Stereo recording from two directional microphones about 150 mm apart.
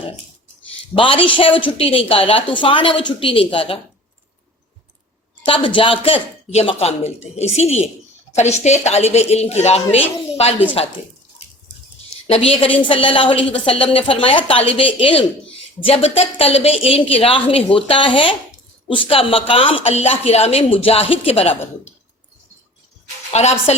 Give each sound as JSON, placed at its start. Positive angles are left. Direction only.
{"t": 0.9, "sound": "a woman's voice", "side_deg": 35}
{"t": 5.5, "sound": "a woman's voice", "side_deg": 35}
{"t": 12.3, "sound": "a woman's voice", "side_deg": 40}
{"t": 23.3, "sound": "speech", "side_deg": 45}